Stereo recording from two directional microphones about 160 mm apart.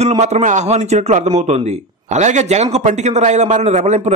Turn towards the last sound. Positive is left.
turn(degrees=-45)  # may be behind; listen again after turning